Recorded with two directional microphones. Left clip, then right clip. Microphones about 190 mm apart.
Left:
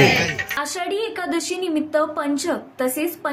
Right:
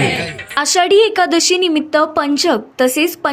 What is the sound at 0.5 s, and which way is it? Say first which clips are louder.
A woman's voice: right 18 dB; 45° right (ahead or behind).